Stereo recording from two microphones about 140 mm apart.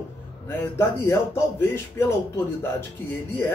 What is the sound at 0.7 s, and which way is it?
Speech, 20° left (ahead or behind).